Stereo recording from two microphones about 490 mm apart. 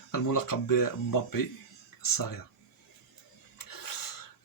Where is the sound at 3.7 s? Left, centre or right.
Left.